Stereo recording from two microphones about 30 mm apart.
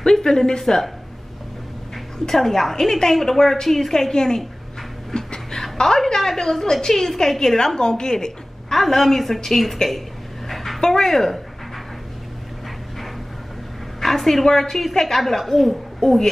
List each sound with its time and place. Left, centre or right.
0.0 s speech: left
2.3 s a woman's voice: centre
3.9 s speech: centre
5.1 s a sound: left
5.6 s a woman's voice: centre
8.7 s a woman's voice: centre
10.5 s a sound: centre
10.9 s a woman's voice: centre
14.0 s a woman's voice: centre
16.0 s speech: centre